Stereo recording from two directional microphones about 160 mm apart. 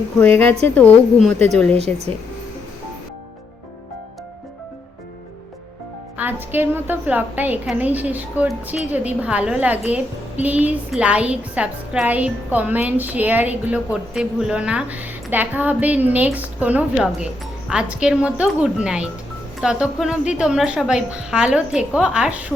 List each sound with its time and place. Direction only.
0.2 s a woman's voice: 10° left (ahead or behind)
1.7 s speech: 40° right (ahead or behind)
6.1 s a woman's voice: 10° right (ahead or behind)